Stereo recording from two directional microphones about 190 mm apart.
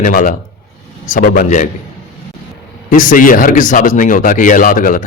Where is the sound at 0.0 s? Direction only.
45° left (ahead or behind).